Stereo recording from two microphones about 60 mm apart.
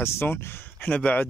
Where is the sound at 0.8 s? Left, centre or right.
Left.